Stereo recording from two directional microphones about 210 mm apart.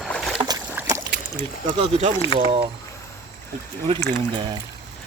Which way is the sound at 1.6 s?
30° right (ahead or behind).